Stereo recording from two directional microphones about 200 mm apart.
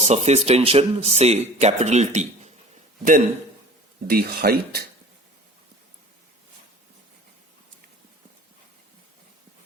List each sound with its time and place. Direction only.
0.0 s speech: 35° right (ahead or behind)
4.0 s speech: 50° right (ahead or behind)